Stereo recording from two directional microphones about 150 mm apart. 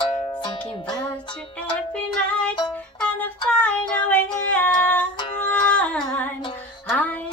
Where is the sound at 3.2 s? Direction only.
10° left (ahead or behind).